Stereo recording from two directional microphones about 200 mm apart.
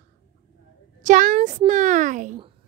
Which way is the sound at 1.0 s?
40° right (ahead or behind).